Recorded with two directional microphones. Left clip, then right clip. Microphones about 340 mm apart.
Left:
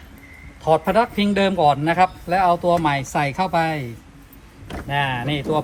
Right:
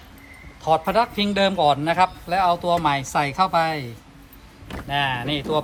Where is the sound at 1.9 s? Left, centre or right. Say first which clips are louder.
Left 2 dB; right.